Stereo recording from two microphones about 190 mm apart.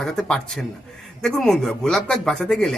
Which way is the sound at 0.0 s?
Centre (ahead or behind).